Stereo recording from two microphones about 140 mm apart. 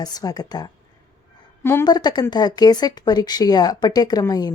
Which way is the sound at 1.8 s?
30° left (ahead or behind).